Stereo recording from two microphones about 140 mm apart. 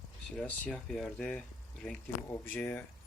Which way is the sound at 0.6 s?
5° left (ahead or behind).